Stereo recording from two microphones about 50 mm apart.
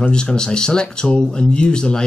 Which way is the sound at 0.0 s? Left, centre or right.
Centre.